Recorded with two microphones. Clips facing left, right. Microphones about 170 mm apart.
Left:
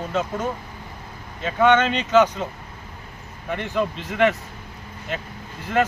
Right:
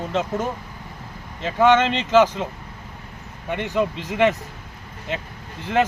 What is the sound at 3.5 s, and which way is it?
Speech, 20° right (ahead or behind).